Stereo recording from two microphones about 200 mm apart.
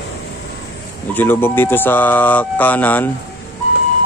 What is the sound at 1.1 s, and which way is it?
A man's voice, 10° left (ahead or behind).